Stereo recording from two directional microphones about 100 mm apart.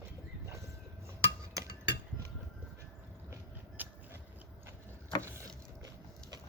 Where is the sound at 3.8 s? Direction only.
15° right (ahead or behind).